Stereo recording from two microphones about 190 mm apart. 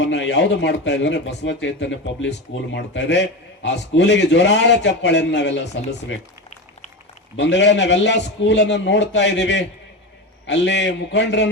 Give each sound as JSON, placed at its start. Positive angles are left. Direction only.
{"t": 0.0, "sound": "a man's voice", "side_deg": 75}
{"t": 7.3, "sound": "a man's voice", "side_deg": 70}